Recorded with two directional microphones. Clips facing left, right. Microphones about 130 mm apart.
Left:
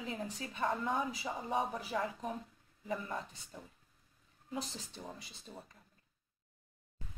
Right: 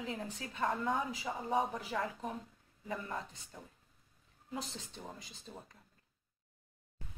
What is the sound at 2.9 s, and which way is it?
Speech, 5° left (ahead or behind).